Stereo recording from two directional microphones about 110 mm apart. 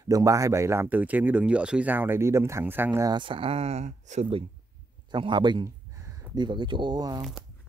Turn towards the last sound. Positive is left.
turn(degrees=-35)  # may be behind; listen again after turning